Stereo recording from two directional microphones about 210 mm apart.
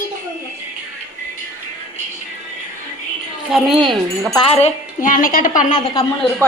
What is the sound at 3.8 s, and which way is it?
Speech, 20° right (ahead or behind).